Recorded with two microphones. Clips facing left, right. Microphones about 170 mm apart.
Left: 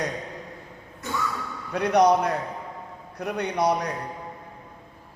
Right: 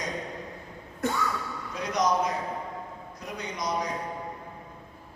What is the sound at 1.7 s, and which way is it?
A man's voice, 65° left (ahead or behind).